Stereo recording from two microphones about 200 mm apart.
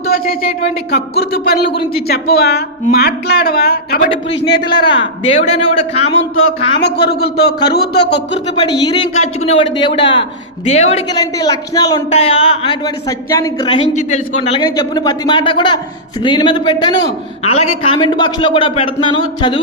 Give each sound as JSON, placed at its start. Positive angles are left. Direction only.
{"t": 0.1, "sound": "speech", "side_deg": 45}
{"t": 4.4, "sound": "a man's voice", "side_deg": 20}
{"t": 6.7, "sound": "speech", "side_deg": 60}
{"t": 8.6, "sound": "a man's voice", "side_deg": 20}
{"t": 9.1, "sound": "a man's voice", "side_deg": 35}
{"t": 11.1, "sound": "a man's voice", "side_deg": 20}
{"t": 12.1, "sound": "a man's voice", "side_deg": 30}